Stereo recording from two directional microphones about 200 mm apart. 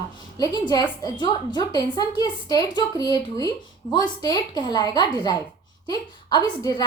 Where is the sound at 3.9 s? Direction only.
20° left (ahead or behind).